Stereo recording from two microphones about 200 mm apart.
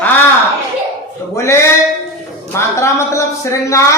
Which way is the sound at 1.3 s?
15° left (ahead or behind).